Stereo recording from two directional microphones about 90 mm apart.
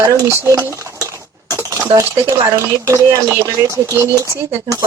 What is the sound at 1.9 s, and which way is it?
Speech, 35° right (ahead or behind).